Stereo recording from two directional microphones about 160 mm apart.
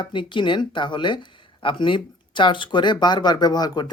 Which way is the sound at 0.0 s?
30° left (ahead or behind).